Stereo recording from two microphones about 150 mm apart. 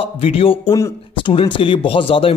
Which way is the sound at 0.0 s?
40° left (ahead or behind).